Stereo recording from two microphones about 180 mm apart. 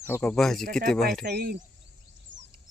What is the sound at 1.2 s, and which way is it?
Speech, 60° right (ahead or behind).